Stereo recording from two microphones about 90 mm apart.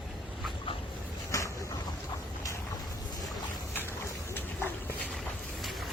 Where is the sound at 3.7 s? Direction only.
25° left (ahead or behind).